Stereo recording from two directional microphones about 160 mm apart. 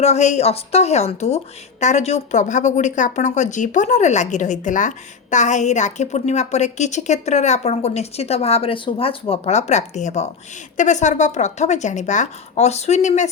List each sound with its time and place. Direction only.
0.0 s speech: 45° left (ahead or behind)